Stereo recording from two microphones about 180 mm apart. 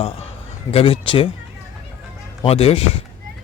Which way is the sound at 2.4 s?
35° left (ahead or behind).